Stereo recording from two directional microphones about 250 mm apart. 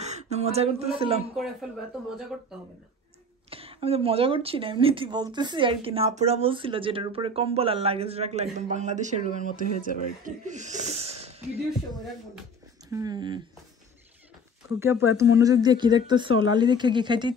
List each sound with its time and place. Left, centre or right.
0.0 s speech: right
1.3 s speech: centre
3.4 s speech: right
12.9 s speech: centre
14.8 s speech: centre